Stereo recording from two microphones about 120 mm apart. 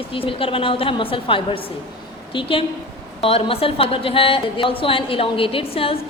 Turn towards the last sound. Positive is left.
turn(degrees=50)  # may be behind; listen again after turning